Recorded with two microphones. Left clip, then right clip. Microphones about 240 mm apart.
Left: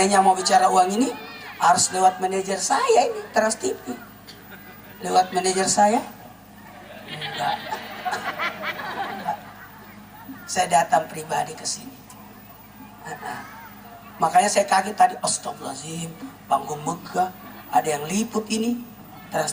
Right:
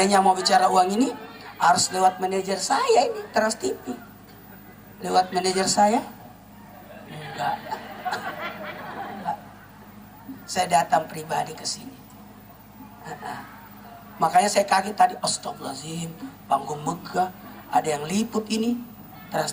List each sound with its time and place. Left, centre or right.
0.0 s speech: centre
5.1 s speech: centre
7.1 s a sound: centre
10.5 s speech: centre
14.2 s speech: centre
16.6 s a man's voice: right
17.7 s speech: centre